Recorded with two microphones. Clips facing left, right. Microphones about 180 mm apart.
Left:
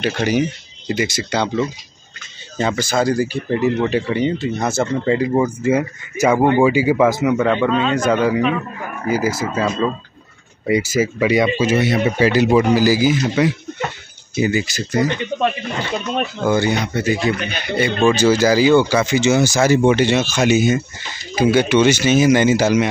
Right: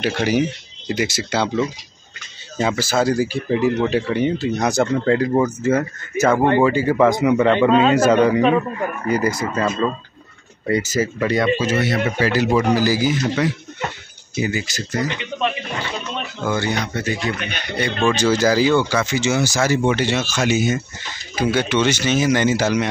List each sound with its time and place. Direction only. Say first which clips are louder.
0.0 s speech: left 1 dB; 5° right (ahead or behind); by 15.0 s 10° left (ahead or behind)
16.4 s speech: left 4 dB; 10° left (ahead or behind)